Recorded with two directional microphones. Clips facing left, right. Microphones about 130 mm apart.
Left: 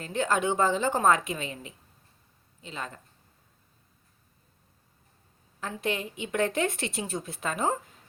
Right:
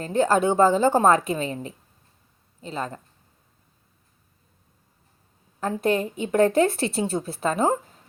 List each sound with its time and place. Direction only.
0.0 s a woman's voice: 35° right (ahead or behind)
5.5 s a woman's voice: 40° right (ahead or behind)